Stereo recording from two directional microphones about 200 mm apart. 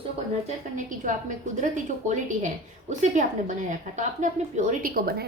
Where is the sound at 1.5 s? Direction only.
40° right (ahead or behind).